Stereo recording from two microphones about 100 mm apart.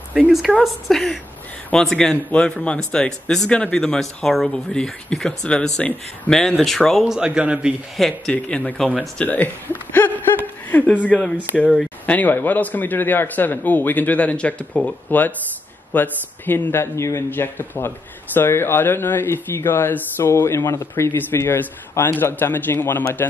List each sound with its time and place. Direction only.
0.1 s a woman's voice: 10° right (ahead or behind)
0.8 s a man's voice: centre (ahead or behind)
8.0 s a man's voice: 10° left (ahead or behind)
11.7 s a sound: 5° left (ahead or behind)
12.2 s a man's voice: 20° left (ahead or behind)